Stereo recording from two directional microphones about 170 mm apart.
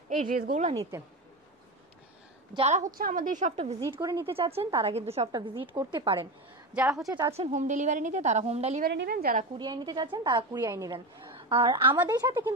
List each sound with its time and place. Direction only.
0.1 s a woman's voice: 50° right (ahead or behind)
2.5 s a woman's voice: 40° right (ahead or behind)
3.5 s a woman's voice: 35° right (ahead or behind)
4.0 s speech: 15° right (ahead or behind)
4.4 s a woman's voice: 35° right (ahead or behind)
6.7 s a woman's voice: 5° right (ahead or behind)
7.1 s a woman's voice: 20° right (ahead or behind)
7.3 s a woman's voice: 45° right (ahead or behind)
8.8 s a woman's voice: 70° right (ahead or behind)
9.6 s a woman's voice: 25° right (ahead or behind)
10.6 s speech: 15° right (ahead or behind)
10.9 s a woman's voice: 30° right (ahead or behind)